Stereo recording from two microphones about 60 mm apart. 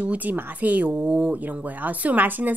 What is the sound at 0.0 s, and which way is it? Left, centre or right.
A woman's voice, right.